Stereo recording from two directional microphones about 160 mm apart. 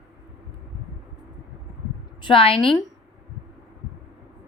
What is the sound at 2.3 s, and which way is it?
Speech, 35° left (ahead or behind).